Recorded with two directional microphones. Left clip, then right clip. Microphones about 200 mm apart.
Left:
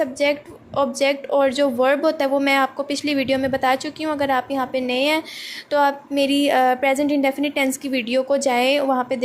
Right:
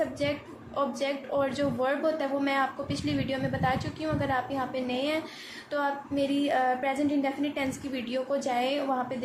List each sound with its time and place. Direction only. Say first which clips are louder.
0.2 s a woman's voice: left 10 dB; 40° left (ahead or behind)